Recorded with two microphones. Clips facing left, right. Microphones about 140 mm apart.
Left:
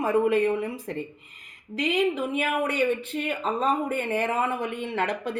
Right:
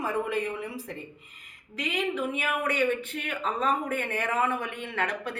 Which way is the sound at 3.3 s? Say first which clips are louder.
Left 2 dB; 35° left (ahead or behind).